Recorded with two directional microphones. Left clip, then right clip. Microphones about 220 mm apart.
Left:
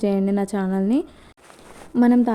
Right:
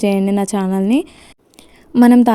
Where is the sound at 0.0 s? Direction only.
25° right (ahead or behind).